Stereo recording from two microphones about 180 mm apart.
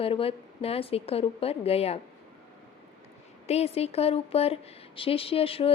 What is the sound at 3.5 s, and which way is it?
Speech, 35° left (ahead or behind).